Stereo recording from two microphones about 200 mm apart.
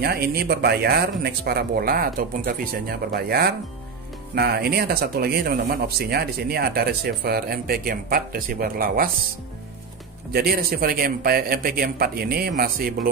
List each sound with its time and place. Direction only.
0.0 s speech: 50° right (ahead or behind)
10.3 s speech: 50° right (ahead or behind)